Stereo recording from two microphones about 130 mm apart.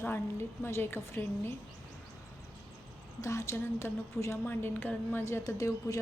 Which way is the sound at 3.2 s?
25° left (ahead or behind).